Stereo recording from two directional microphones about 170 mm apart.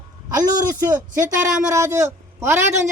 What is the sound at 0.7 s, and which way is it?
A man's voice, 15° right (ahead or behind).